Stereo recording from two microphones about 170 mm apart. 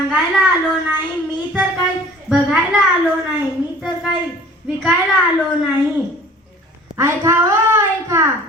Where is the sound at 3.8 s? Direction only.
5° right (ahead or behind).